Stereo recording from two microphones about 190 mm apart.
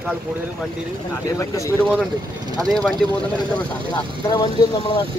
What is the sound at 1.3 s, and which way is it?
Speech, 15° left (ahead or behind).